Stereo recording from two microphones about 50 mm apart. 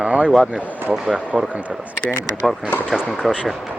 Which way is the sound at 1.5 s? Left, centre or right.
Right.